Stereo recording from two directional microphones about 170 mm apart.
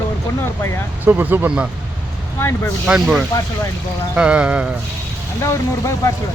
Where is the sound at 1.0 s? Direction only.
10° right (ahead or behind).